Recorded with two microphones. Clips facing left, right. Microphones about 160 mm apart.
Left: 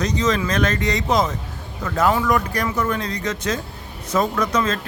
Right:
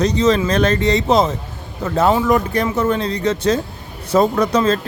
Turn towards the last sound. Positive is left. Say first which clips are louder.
# right 5 dB
turn(degrees=-30)  # may be behind; listen again after turning